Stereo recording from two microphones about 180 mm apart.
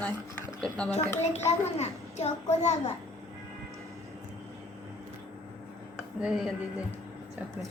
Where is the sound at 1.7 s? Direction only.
35° left (ahead or behind).